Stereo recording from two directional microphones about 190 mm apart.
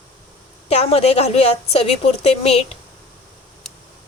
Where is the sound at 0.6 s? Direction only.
35° left (ahead or behind).